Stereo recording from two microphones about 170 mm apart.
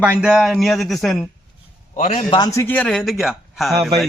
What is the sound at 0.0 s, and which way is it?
Speech, 5° right (ahead or behind).